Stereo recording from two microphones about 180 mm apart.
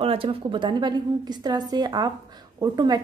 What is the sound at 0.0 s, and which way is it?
A woman's voice, 30° right (ahead or behind).